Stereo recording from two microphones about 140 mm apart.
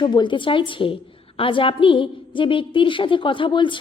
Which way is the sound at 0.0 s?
35° left (ahead or behind).